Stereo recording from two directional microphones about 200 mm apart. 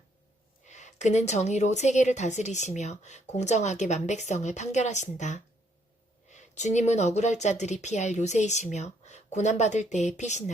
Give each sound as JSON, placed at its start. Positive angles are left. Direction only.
{"t": 0.6, "sound": "a woman's voice", "side_deg": 35}